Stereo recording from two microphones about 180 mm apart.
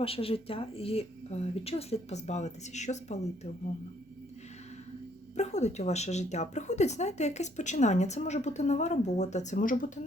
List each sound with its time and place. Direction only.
0.0 s speech: 30° left (ahead or behind)
5.4 s speech: 40° left (ahead or behind)